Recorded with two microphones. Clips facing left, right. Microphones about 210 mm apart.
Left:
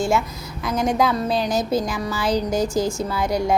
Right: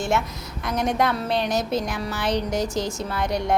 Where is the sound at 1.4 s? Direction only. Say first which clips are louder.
Left 2 dB; 25° right (ahead or behind).